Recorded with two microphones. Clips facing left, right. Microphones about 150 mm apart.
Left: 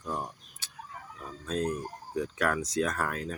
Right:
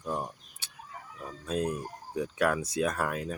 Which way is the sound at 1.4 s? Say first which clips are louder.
Even; 10° right (ahead or behind).